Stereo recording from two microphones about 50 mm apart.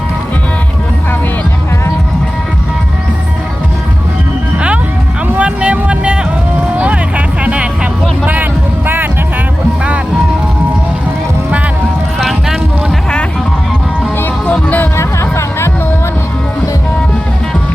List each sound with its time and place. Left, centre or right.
4.5 s music: right
5.4 s vehicle: centre
5.7 s music: right
6.6 s a sound: right
7.4 s music: right
14.4 s music: left
14.9 s music: left